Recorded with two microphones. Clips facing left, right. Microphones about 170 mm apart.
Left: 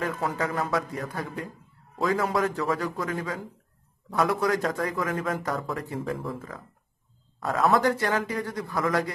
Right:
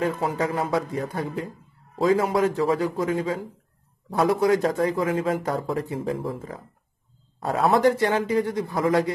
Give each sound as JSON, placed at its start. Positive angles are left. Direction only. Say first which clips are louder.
{"t": 0.0, "sound": "a man's voice", "louder": "right 4 dB", "side_deg": -25}